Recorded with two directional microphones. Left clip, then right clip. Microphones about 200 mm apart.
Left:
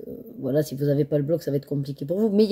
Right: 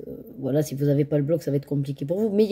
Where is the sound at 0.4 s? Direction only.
5° right (ahead or behind).